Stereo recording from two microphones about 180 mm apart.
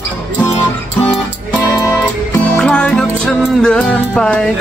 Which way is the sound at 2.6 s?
5° left (ahead or behind).